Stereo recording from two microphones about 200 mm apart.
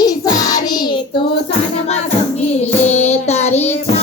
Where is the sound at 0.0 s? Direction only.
20° left (ahead or behind).